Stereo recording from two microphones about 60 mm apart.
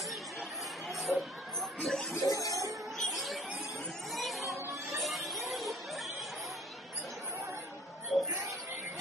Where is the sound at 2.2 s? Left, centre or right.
Left.